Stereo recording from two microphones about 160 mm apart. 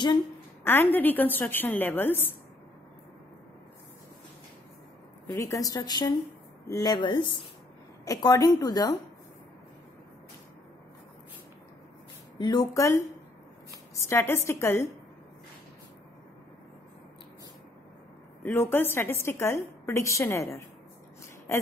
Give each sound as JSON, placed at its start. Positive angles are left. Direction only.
{"t": 0.7, "sound": "a woman's voice", "side_deg": 10}
{"t": 5.2, "sound": "a woman's voice", "side_deg": 15}
{"t": 12.4, "sound": "a woman's voice", "side_deg": 25}
{"t": 14.0, "sound": "a woman's voice", "side_deg": 15}
{"t": 18.4, "sound": "a woman's voice", "side_deg": 15}